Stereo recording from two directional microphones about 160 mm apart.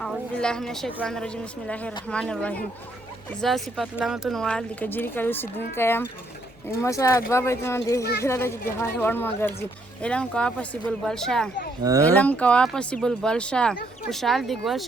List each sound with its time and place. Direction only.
0.0 s a woman's voice: 5° left (ahead or behind)
11.8 s speech: 20° right (ahead or behind)
12.1 s speech: 10° left (ahead or behind)